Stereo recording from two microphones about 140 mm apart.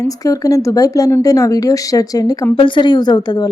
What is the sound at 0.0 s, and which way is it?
A woman's voice, 25° left (ahead or behind).